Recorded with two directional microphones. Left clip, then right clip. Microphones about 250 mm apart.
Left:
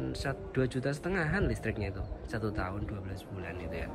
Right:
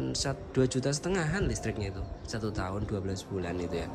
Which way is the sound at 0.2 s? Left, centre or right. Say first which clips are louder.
Right 4 dB; centre.